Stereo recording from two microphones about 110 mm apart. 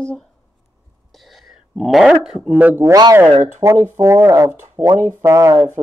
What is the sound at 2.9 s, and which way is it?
Speech, 35° right (ahead or behind).